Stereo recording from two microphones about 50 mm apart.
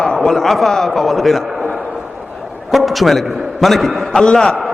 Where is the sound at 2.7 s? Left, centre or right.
Centre.